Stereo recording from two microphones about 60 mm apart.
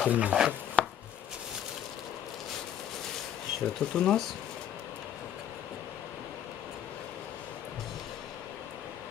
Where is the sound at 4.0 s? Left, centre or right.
Centre.